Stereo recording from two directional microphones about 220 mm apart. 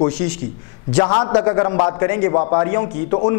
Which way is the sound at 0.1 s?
10° left (ahead or behind).